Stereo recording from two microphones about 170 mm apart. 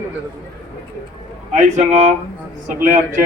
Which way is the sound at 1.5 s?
45° right (ahead or behind).